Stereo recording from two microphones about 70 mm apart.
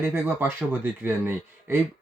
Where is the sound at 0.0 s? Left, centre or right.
Right.